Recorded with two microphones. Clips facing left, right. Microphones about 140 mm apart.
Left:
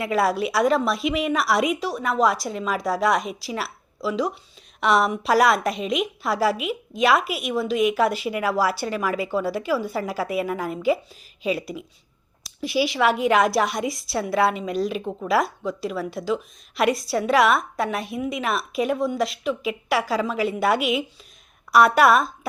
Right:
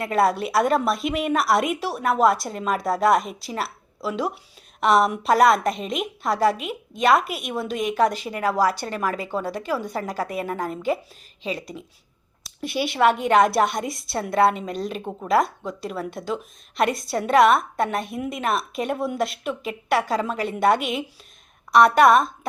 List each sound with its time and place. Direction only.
0.0 s a woman's voice: centre (ahead or behind)